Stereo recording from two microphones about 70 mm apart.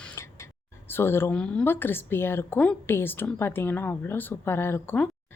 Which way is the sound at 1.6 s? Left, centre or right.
Left.